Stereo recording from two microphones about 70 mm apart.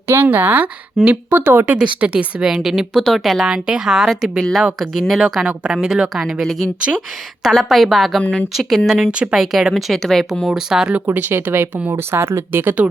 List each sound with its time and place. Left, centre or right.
0.1 s speech: right
1.0 s speech: centre
1.3 s speech: right; by 6.6 s centre
6.9 s speech: centre
8.9 s speech: centre
10.5 s speech: centre
10.9 s speech: right